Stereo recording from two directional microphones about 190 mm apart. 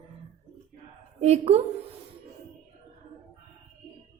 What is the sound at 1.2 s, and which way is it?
Speech, 35° right (ahead or behind).